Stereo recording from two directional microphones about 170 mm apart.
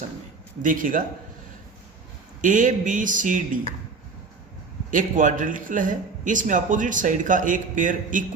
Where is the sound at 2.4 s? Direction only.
50° right (ahead or behind).